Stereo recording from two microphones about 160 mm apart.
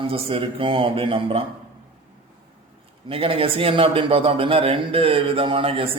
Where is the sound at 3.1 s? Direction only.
35° right (ahead or behind).